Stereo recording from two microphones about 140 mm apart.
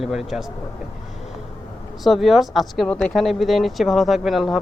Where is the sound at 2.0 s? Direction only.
Centre (ahead or behind).